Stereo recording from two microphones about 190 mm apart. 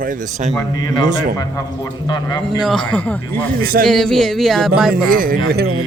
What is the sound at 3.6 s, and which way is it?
Speech, 50° right (ahead or behind).